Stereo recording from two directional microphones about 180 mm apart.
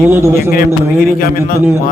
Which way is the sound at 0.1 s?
15° right (ahead or behind).